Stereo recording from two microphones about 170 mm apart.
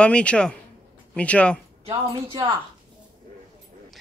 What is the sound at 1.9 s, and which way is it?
Speech, 25° right (ahead or behind).